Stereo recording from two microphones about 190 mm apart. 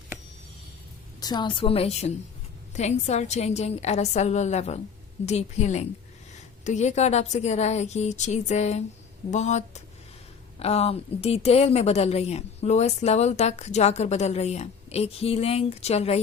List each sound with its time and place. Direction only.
1.2 s a woman's voice: 25° left (ahead or behind)